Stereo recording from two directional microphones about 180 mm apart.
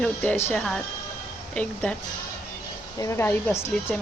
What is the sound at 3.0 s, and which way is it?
Speech, 15° left (ahead or behind).